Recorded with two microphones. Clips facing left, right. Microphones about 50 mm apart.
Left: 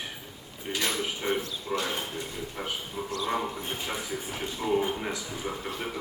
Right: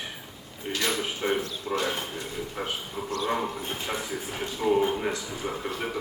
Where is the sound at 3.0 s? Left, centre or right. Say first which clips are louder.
Right 3 dB; right.